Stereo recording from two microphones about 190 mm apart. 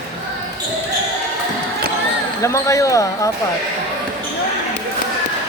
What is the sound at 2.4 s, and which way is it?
Speech, 15° left (ahead or behind).